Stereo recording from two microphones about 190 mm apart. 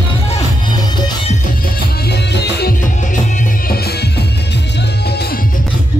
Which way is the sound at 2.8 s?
40° left (ahead or behind).